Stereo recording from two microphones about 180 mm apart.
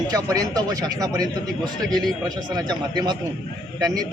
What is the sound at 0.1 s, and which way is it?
A man's voice, 20° right (ahead or behind).